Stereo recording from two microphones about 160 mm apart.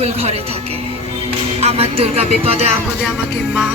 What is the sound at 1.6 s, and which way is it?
Music, 40° right (ahead or behind).